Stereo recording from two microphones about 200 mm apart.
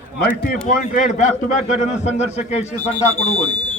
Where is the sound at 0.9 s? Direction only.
40° left (ahead or behind).